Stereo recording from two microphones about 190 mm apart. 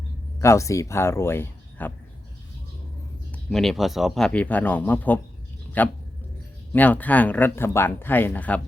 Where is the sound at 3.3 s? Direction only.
Centre (ahead or behind).